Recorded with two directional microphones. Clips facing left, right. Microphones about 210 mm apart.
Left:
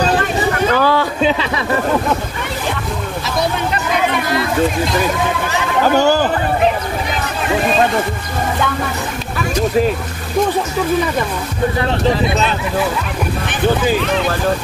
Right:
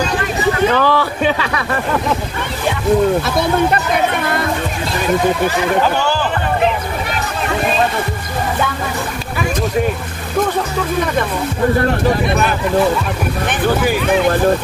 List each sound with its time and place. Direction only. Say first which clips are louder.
0.7 s speech: even; 10° left (ahead or behind)
1.2 s speech: left 1 dB; 25° left (ahead or behind)
5.9 s speech: left 5 dB; 40° left (ahead or behind)